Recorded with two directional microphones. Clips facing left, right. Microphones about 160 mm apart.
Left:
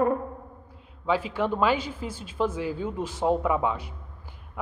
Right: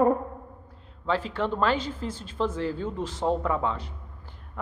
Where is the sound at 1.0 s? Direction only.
10° left (ahead or behind).